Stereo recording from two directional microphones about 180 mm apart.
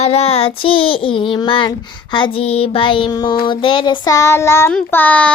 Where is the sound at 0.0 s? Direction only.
35° left (ahead or behind).